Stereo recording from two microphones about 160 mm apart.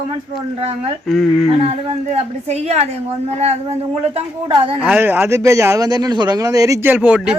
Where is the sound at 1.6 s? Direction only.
40° right (ahead or behind).